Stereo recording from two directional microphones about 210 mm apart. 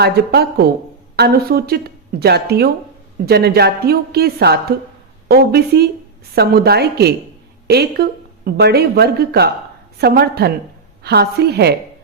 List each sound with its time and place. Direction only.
0.0 s speech: 50° right (ahead or behind)